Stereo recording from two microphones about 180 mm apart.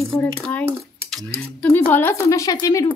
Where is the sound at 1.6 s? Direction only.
10° left (ahead or behind).